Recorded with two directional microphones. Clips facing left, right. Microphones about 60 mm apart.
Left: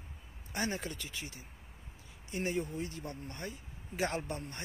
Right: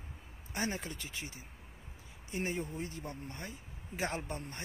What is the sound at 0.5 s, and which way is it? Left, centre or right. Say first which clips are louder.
Speech: left 1 dB; right.